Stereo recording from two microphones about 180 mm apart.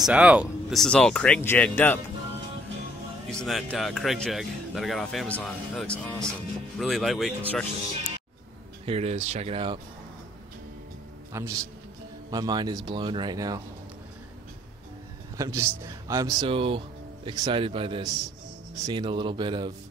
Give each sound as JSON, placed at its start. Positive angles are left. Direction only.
{"t": 0.0, "sound": "speech", "side_deg": -5}
{"t": 3.3, "sound": "speech", "side_deg": 0}
{"t": 8.8, "sound": "speech", "side_deg": -35}
{"t": 11.3, "sound": "a man's voice", "side_deg": -15}
{"t": 15.3, "sound": "speech", "side_deg": -20}